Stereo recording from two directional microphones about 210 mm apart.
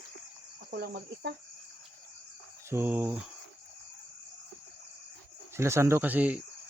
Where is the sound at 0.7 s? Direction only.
50° right (ahead or behind).